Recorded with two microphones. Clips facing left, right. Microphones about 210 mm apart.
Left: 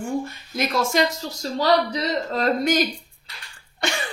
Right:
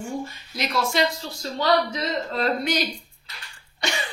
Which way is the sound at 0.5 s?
45° left (ahead or behind).